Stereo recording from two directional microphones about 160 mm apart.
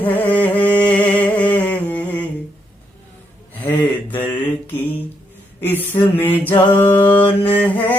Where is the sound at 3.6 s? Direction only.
10° left (ahead or behind).